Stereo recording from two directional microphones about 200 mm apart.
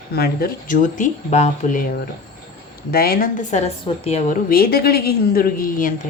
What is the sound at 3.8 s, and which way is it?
Speech, 30° left (ahead or behind).